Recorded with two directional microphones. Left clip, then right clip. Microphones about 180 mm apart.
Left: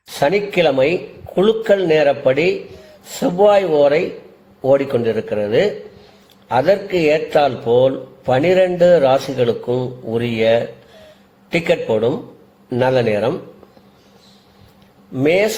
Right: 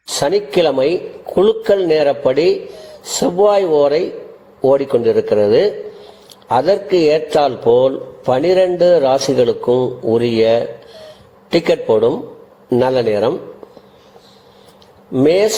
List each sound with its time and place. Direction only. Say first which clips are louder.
0.2 s a man's voice: right 1 dB; 15° right (ahead or behind)
9.6 s speech: right 6 dB; 5° right (ahead or behind)
10.1 s a man's voice: right 2 dB; 15° right (ahead or behind)
15.2 s a man's voice: right 3 dB; 15° right (ahead or behind)